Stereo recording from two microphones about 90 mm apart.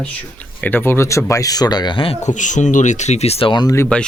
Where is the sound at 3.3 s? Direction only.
80° left.